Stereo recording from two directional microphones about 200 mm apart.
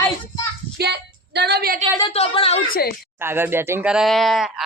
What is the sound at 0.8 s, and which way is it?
Speech, 55° right (ahead or behind).